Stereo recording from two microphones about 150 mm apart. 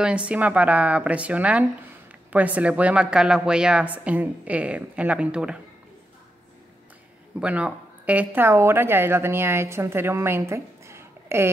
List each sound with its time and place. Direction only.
0.0 s a woman's voice: 5° right (ahead or behind)
7.3 s speech: 10° right (ahead or behind)